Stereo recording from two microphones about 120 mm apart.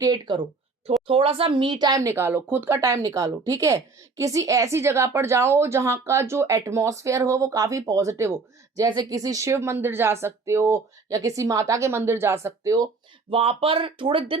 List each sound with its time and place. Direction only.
0.0 s speech: 35° right (ahead or behind)
1.0 s a woman's voice: 50° right (ahead or behind); by 12.9 s 30° right (ahead or behind)
13.3 s speech: 50° right (ahead or behind)